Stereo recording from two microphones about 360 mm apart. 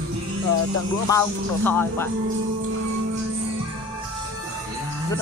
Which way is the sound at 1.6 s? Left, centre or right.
Centre.